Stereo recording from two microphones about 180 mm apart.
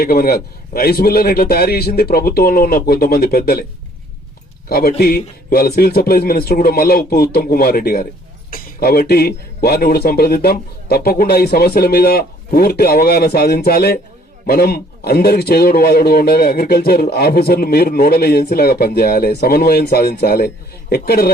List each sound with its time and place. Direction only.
0.0 s a man's voice: 55° left (ahead or behind)
4.7 s a man's voice: 60° left (ahead or behind)